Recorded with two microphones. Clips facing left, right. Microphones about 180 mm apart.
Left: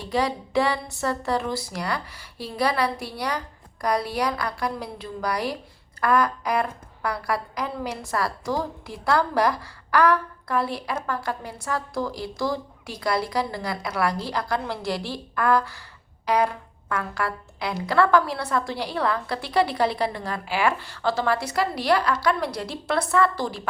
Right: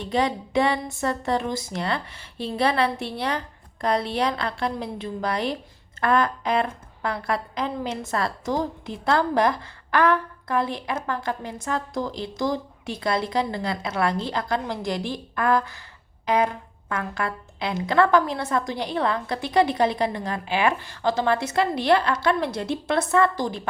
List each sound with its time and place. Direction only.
0.0 s a woman's voice: 20° right (ahead or behind)